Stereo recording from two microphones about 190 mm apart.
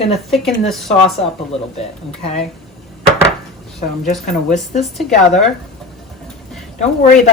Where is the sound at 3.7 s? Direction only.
40° left (ahead or behind).